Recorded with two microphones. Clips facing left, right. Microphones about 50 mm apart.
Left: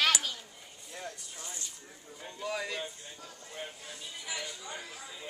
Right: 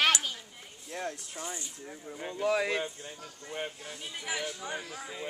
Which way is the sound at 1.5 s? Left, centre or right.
Right.